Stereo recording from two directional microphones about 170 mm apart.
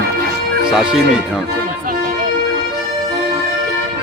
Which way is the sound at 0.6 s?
5° right (ahead or behind).